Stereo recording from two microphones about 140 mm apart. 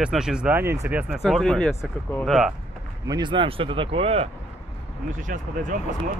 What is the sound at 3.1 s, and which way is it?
Speech, 35° right (ahead or behind).